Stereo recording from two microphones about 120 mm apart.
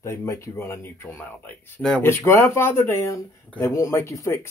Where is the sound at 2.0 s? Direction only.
20° left (ahead or behind).